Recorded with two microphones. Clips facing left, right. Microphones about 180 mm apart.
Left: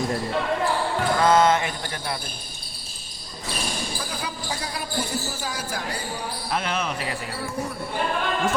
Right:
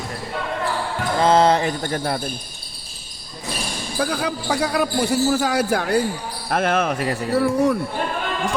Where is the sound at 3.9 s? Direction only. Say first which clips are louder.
Right 9 dB; 65° right (ahead or behind).